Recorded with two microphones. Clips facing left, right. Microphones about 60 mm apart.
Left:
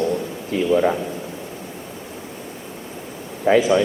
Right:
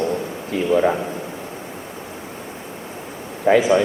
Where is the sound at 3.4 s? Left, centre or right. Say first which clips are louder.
Right 1 dB; centre.